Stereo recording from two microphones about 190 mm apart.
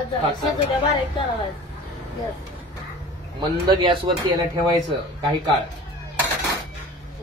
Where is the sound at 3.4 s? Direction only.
25° right (ahead or behind).